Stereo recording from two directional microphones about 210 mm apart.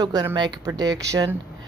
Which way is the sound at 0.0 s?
15° right (ahead or behind).